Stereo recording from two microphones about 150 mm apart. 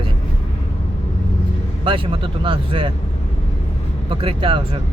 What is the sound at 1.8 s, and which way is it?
Speech, 35° right (ahead or behind).